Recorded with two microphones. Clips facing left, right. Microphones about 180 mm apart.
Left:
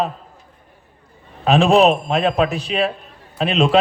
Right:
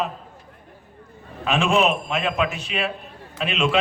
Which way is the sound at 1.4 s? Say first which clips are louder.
Left 7 dB; 35° left (ahead or behind).